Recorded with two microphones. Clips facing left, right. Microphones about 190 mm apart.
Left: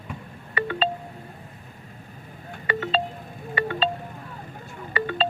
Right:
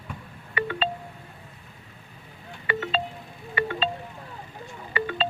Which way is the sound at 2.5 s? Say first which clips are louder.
Left 2 dB; 40° left (ahead or behind).